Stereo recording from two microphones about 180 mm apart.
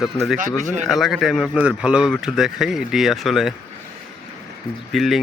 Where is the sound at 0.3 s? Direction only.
45° right (ahead or behind).